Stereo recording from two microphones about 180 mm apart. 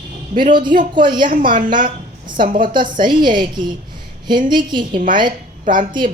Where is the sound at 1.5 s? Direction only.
45° right (ahead or behind).